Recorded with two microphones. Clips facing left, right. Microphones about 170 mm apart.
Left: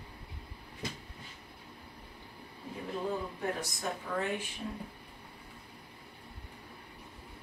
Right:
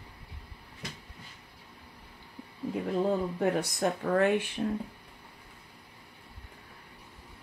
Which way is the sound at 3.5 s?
65° right (ahead or behind).